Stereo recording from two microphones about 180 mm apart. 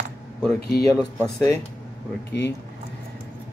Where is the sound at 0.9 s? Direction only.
15° left (ahead or behind).